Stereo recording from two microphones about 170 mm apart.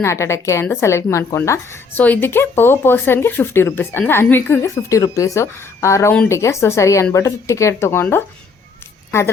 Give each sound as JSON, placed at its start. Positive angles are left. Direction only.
{"t": 0.0, "sound": "a woman's voice", "side_deg": 15}